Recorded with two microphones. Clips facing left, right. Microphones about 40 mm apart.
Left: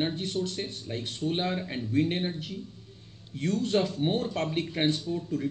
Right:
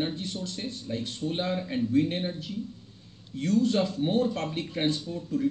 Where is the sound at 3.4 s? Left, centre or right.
Left.